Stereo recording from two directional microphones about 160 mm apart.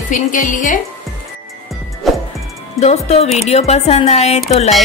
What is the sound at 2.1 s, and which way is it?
Music, centre (ahead or behind).